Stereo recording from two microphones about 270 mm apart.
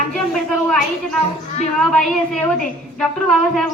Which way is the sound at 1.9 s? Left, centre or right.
Centre.